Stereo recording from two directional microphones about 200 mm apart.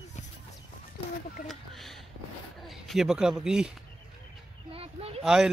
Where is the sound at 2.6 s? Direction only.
Centre (ahead or behind).